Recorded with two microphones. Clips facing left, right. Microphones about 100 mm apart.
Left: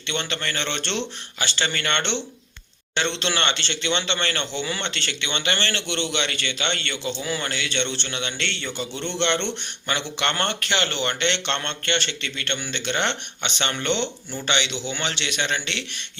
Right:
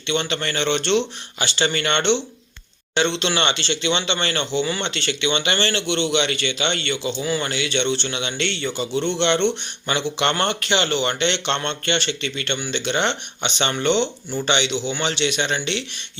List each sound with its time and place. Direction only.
0.1 s a man's voice: 15° right (ahead or behind)